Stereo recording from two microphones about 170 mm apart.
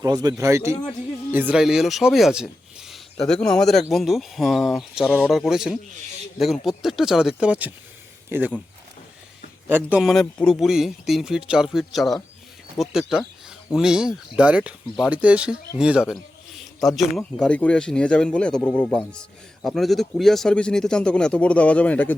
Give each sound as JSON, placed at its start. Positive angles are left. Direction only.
{"t": 0.0, "sound": "speech", "side_deg": -20}
{"t": 9.6, "sound": "speech", "side_deg": -10}
{"t": 10.0, "sound": "speech", "side_deg": 0}